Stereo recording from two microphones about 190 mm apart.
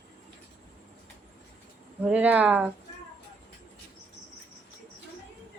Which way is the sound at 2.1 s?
5° right (ahead or behind).